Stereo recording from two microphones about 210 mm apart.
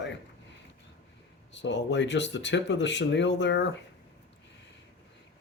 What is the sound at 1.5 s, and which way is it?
Speech, 60° left (ahead or behind).